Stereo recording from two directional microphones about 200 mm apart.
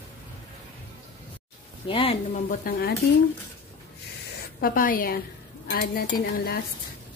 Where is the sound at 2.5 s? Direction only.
45° left (ahead or behind).